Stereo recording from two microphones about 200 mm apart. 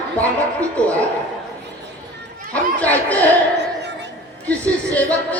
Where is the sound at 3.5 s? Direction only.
60° right (ahead or behind).